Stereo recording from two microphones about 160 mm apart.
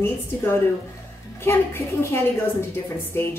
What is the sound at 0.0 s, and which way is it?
Speech, 15° left (ahead or behind).